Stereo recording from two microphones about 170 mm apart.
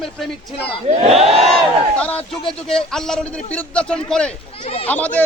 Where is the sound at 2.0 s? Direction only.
10° left (ahead or behind).